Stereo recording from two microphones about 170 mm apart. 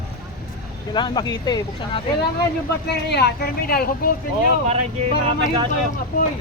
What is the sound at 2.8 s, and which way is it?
Speech, 75° left (ahead or behind).